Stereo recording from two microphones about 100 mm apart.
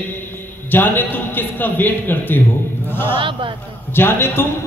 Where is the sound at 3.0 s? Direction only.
55° right (ahead or behind).